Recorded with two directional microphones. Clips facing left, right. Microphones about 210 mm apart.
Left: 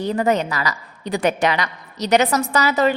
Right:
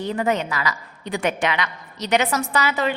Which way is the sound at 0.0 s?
40° left (ahead or behind).